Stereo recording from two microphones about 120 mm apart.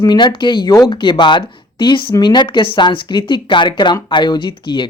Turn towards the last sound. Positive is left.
turn(degrees=40)  # may be behind; listen again after turning